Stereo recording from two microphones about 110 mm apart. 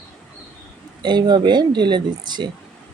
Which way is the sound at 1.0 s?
40° right (ahead or behind).